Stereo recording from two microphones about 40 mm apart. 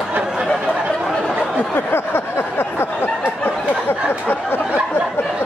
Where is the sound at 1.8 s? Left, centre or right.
Left.